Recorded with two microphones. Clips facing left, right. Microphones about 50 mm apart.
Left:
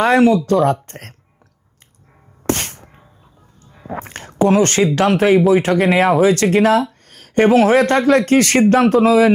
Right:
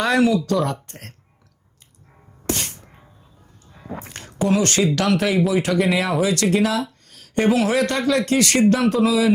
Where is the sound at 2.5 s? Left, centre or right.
Left.